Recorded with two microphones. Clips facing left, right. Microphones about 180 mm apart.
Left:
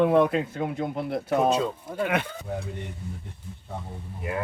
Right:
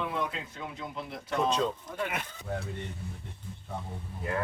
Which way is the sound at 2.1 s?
70° left (ahead or behind).